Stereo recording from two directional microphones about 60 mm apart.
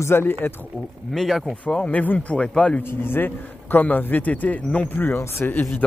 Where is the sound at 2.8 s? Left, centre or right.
Left.